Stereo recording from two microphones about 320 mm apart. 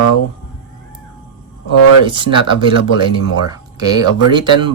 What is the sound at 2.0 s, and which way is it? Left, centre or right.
Speech, centre.